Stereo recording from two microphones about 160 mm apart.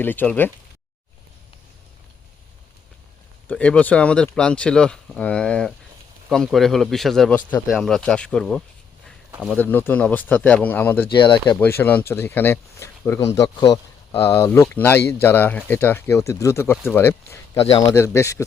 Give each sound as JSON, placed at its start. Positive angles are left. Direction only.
{"t": 0.0, "sound": "speech", "side_deg": 10}
{"t": 3.5, "sound": "speech", "side_deg": 5}
{"t": 11.1, "sound": "speech", "side_deg": 30}
{"t": 11.6, "sound": "speech", "side_deg": 10}